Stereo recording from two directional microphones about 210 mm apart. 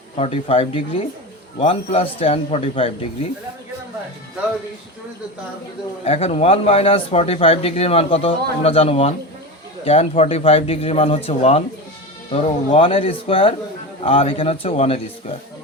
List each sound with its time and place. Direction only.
0.2 s speech: 25° left (ahead or behind)
6.1 s speech: 30° left (ahead or behind)